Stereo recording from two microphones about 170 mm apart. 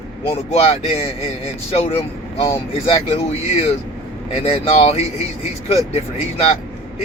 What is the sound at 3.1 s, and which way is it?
Speech, 35° left (ahead or behind).